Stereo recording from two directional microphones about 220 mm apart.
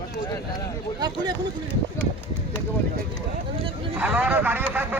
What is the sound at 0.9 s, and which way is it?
Speech, 20° right (ahead or behind).